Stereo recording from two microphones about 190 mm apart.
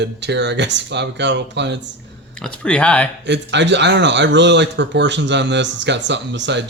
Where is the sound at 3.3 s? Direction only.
65° right (ahead or behind).